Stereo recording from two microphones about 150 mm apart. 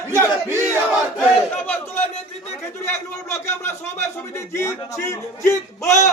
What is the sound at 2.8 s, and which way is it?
Speech, 15° left (ahead or behind).